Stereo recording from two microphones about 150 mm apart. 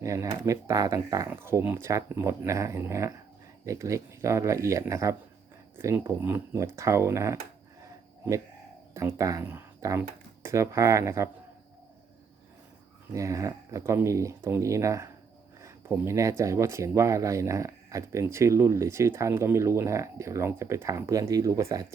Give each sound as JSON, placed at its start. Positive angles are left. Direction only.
{"t": 0.0, "sound": "speech", "side_deg": -20}
{"t": 7.8, "sound": "a sound", "side_deg": -20}
{"t": 9.0, "sound": "speech", "side_deg": -20}
{"t": 13.1, "sound": "speech", "side_deg": -20}
{"t": 15.6, "sound": "a sound", "side_deg": -20}
{"t": 16.4, "sound": "speech", "side_deg": -20}